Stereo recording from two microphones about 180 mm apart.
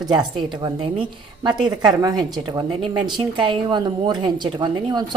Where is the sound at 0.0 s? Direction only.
25° right (ahead or behind).